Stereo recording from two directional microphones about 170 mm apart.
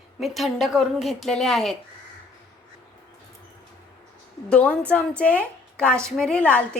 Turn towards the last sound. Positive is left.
turn(degrees=5)  # may be behind; listen again after turning